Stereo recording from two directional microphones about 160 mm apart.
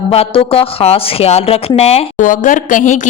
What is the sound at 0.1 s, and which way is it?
A woman's voice, 35° left (ahead or behind).